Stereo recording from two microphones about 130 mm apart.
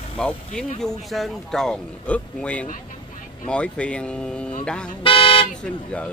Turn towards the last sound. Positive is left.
turn(degrees=40)  # may be behind; listen again after turning